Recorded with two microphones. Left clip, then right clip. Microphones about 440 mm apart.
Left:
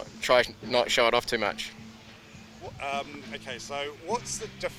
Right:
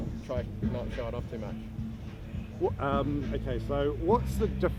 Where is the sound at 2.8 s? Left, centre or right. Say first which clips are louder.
Right 2 dB; right.